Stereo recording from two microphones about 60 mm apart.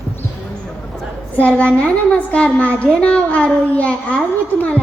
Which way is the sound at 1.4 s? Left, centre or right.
Left.